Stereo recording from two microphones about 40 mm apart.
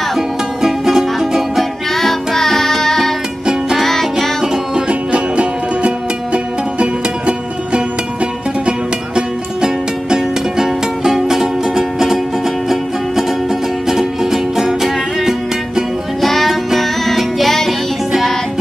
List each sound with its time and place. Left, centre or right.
0.1 s music: centre
1.6 s music: centre
4.4 s music: centre
5.1 s music: right; by 15.8 s centre
16.2 s music: centre